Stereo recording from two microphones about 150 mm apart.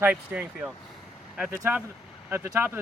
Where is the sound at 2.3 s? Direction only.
15° right (ahead or behind).